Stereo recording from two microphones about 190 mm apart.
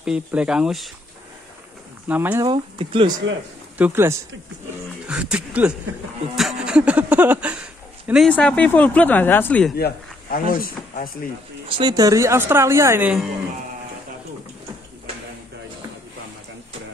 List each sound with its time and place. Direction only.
0.0 s speech: 5° right (ahead or behind)
2.0 s speech: 10° right (ahead or behind)
2.4 s speech: 25° right (ahead or behind)
3.7 s speech: 10° right (ahead or behind); by 9.8 s 5° left (ahead or behind)
9.8 s speech: 55° left (ahead or behind)
11.7 s speech: 20° right (ahead or behind); by 13.3 s 5° right (ahead or behind)